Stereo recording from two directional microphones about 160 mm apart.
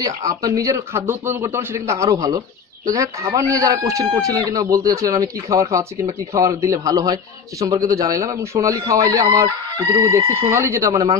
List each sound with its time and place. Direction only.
0.0 s a man's voice: 20° right (ahead or behind)